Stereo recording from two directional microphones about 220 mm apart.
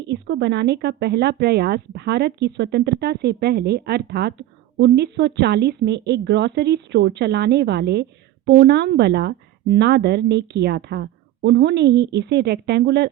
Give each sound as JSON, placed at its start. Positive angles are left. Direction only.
{"t": 0.1, "sound": "speech", "side_deg": -55}